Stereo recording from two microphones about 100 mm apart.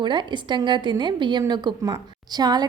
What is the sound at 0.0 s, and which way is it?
A woman's voice, 50° right (ahead or behind).